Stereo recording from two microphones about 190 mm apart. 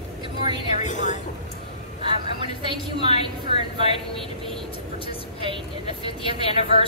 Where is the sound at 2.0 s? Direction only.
25° right (ahead or behind).